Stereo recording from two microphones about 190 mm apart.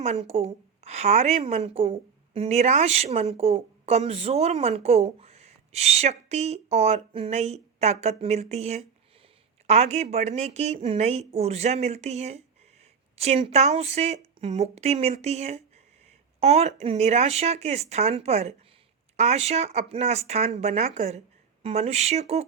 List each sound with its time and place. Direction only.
0.0 s a woman's voice: 35° right (ahead or behind)